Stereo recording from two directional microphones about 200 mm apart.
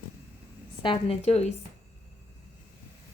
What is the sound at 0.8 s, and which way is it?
Speech, 25° left (ahead or behind).